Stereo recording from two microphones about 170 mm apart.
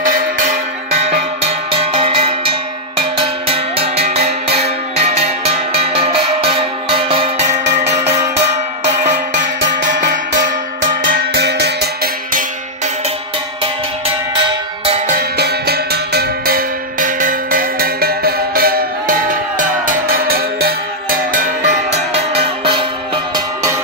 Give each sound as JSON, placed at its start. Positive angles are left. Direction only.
{"t": 0.0, "sound": "music", "side_deg": -55}
{"t": 1.1, "sound": "music", "side_deg": -35}
{"t": 11.3, "sound": "music", "side_deg": -85}
{"t": 15.3, "sound": "cowbell", "side_deg": -70}